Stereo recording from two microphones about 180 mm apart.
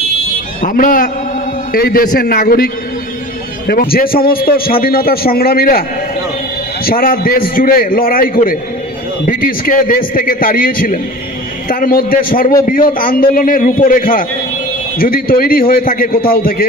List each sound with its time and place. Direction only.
0.6 s a man's voice: 45° left (ahead or behind)